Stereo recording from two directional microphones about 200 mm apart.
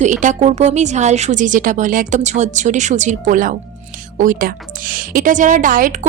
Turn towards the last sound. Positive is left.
turn(degrees=-45)  # may be behind; listen again after turning